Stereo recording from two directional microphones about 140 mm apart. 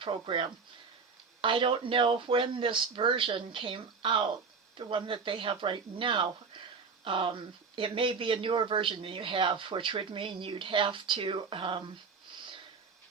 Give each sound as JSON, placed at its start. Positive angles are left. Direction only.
{"t": 0.0, "sound": "speech", "side_deg": -35}